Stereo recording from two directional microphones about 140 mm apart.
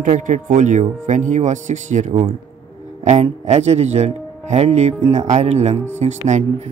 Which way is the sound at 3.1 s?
55° right (ahead or behind).